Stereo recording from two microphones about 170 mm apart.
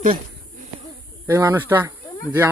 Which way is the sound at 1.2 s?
15° right (ahead or behind).